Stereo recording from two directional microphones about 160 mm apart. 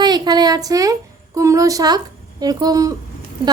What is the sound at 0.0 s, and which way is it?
A woman's voice, 25° right (ahead or behind).